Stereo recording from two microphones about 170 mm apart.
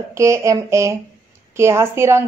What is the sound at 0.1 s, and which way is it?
A woman's voice, 15° right (ahead or behind).